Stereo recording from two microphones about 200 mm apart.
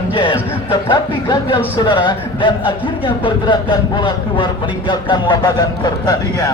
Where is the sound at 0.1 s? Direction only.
25° left (ahead or behind).